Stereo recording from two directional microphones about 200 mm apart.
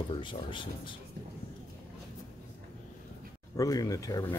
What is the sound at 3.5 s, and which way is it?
Speech, 15° left (ahead or behind).